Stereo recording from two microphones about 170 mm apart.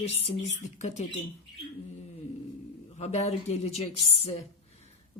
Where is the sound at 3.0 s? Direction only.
40° left (ahead or behind).